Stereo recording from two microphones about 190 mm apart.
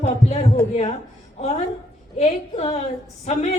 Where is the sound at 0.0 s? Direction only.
35° left (ahead or behind).